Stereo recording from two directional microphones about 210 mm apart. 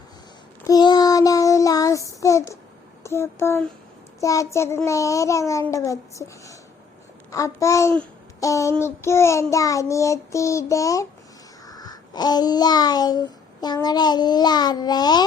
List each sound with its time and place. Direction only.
0.7 s child singing: 20° left (ahead or behind)
4.2 s a child's voice: 15° left (ahead or behind)
4.5 s child singing: 10° left (ahead or behind)
7.3 s a child's voice: 15° left (ahead or behind)
8.7 s child singing: 10° left (ahead or behind)
11.6 s a sound: 20° left (ahead or behind)